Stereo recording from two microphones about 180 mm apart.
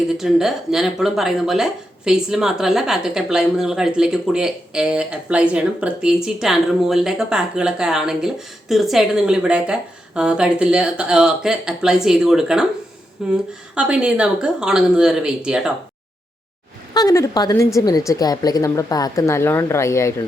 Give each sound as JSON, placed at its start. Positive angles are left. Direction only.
{"t": 0.2, "sound": "speech", "side_deg": 0}
{"t": 16.9, "sound": "a woman's voice", "side_deg": 20}